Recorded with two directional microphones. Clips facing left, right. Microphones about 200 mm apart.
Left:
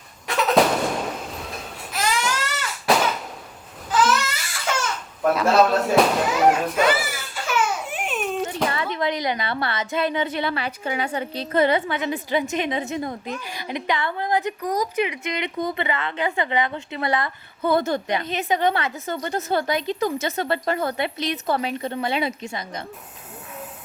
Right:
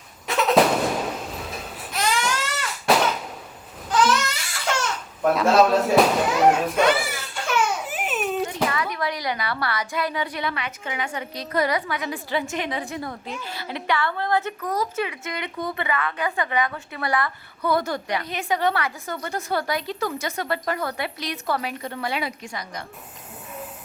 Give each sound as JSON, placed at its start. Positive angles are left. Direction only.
{"t": 0.3, "sound": "a sound", "side_deg": 0}
{"t": 3.8, "sound": "crying", "side_deg": 5}
{"t": 8.7, "sound": "a woman's voice", "side_deg": 25}